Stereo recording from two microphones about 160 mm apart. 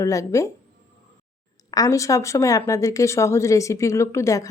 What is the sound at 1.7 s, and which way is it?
Speech, 20° left (ahead or behind).